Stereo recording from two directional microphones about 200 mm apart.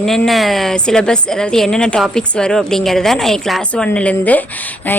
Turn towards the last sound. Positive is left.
turn(degrees=10)  # may be behind; listen again after turning